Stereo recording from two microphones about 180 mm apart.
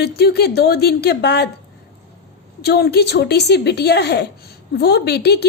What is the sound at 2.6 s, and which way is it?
A woman's voice, 65° left (ahead or behind).